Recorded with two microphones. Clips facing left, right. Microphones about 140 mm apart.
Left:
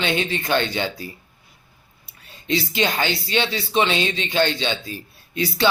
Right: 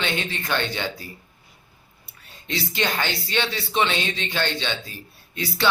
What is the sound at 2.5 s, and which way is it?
Speech, 15° left (ahead or behind).